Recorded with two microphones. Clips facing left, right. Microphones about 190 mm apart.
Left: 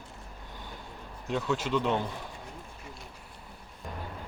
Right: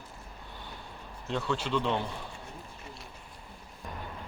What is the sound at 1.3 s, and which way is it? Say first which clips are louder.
Speech: left 2 dB; 10° left (ahead or behind).